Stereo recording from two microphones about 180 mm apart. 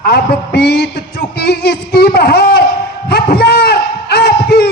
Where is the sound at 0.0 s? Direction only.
60° left (ahead or behind).